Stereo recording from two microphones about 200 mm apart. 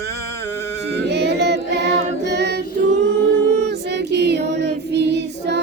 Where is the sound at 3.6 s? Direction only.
60° right (ahead or behind).